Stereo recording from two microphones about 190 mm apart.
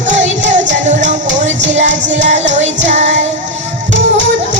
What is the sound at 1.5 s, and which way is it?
Music, 70° right (ahead or behind).